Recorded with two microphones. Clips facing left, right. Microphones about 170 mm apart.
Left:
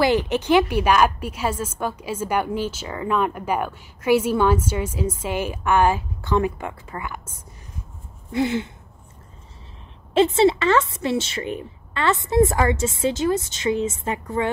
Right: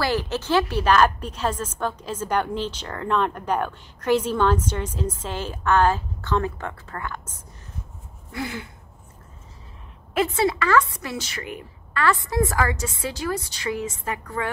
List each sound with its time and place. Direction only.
0.0 s a woman's voice: 20° left (ahead or behind)
8.3 s a woman's voice: 20° left (ahead or behind)
10.1 s a woman's voice: 25° left (ahead or behind)